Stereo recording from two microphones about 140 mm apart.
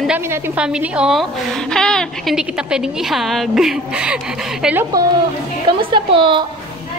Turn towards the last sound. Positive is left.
turn(degrees=-35)  # may be behind; listen again after turning